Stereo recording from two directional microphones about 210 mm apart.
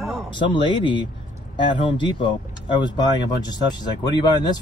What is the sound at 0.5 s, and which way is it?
Speech, 20° left (ahead or behind).